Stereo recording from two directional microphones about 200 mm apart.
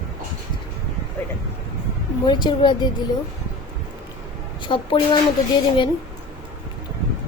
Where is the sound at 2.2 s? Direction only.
20° left (ahead or behind).